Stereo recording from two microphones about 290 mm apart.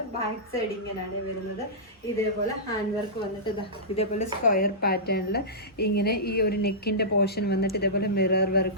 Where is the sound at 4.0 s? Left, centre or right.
Left.